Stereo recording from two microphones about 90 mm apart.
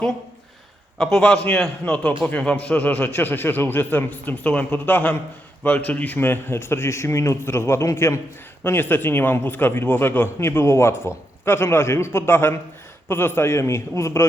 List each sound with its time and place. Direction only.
0.9 s a man's voice: 5° left (ahead or behind); by 14.3 s 30° left (ahead or behind)